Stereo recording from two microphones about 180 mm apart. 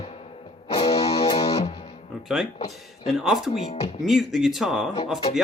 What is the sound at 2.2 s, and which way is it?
Speech, 5° right (ahead or behind).